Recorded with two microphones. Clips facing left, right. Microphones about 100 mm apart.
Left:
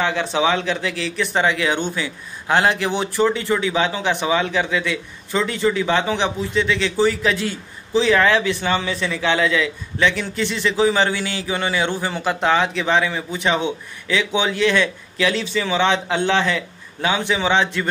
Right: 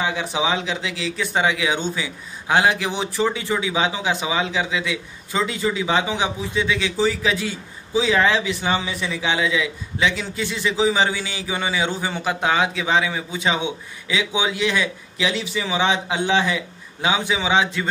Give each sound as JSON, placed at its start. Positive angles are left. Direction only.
{"t": 0.0, "sound": "a man's voice", "side_deg": -15}